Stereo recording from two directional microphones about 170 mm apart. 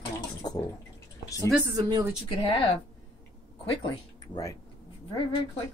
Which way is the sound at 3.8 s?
25° left (ahead or behind).